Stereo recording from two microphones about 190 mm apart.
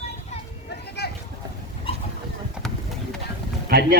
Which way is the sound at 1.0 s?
55° left (ahead or behind).